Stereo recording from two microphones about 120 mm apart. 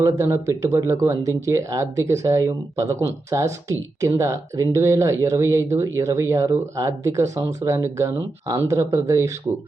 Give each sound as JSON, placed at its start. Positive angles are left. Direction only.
{"t": 0.0, "sound": "speech", "side_deg": -25}